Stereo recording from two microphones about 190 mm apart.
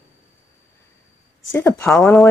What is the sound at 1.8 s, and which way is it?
Speech, 5° left (ahead or behind).